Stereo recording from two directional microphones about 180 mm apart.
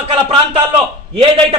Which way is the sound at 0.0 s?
30° right (ahead or behind).